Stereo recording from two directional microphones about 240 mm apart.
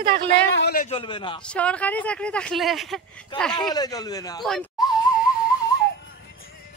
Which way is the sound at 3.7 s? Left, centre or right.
Centre.